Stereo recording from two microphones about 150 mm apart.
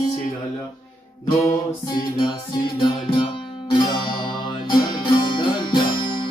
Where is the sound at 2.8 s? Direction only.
35° left (ahead or behind).